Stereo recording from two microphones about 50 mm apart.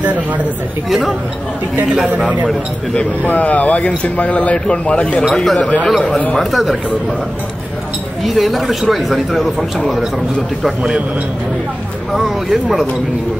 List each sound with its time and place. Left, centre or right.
0.0 s speech: right
3.3 s speech: left
5.3 s speech: centre
5.6 s speech: left
6.5 s speech: centre
8.2 s speech: centre
12.1 s speech: centre